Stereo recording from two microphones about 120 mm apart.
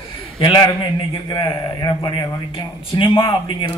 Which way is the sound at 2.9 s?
45° left (ahead or behind).